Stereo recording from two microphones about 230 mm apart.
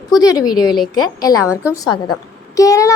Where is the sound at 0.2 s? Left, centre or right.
Centre.